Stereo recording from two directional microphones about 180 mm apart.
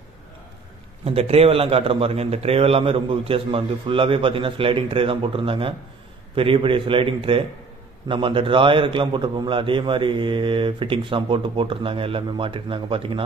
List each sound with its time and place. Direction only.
1.0 s a man's voice: 35° right (ahead or behind)